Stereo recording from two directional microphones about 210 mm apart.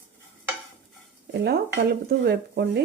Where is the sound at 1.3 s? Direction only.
50° right (ahead or behind).